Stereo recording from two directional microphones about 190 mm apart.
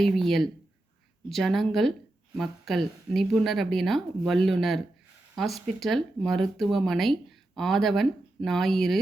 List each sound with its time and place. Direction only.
0.0 s speech: centre (ahead or behind)